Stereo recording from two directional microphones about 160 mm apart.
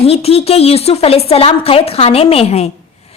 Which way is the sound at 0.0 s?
40° left (ahead or behind).